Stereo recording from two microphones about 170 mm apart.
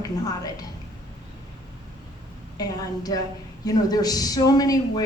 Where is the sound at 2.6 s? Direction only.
20° left (ahead or behind).